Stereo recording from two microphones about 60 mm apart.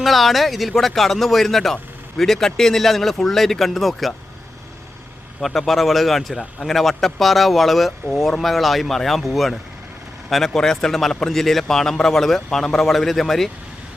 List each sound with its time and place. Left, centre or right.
0.0 s speech: centre
5.4 s speech: centre